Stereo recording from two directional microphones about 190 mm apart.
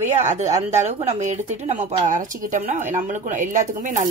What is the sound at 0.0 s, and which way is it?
Speech, 40° right (ahead or behind).